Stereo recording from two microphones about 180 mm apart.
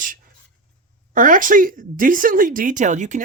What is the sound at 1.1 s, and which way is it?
Speech, 50° right (ahead or behind).